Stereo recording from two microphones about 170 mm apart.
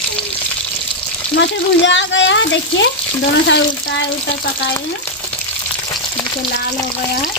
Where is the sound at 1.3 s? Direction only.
90° left.